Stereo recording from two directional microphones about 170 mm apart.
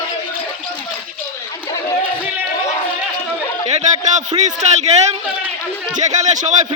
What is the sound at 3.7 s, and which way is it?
A man's voice, 40° right (ahead or behind).